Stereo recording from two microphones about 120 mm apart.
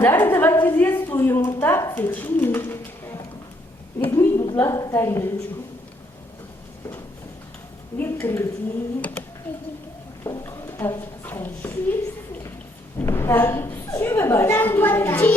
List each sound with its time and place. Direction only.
0.0 s a woman's voice: 20° left (ahead or behind)
4.1 s a sound: 25° left (ahead or behind)
4.6 s a woman's voice: 25° left (ahead or behind)
7.9 s a woman's voice: 20° left (ahead or behind)
9.5 s a sound: 15° left (ahead or behind)
10.2 s a woman's voice: 25° left (ahead or behind)
13.0 s a woman's voice: 20° left (ahead or behind)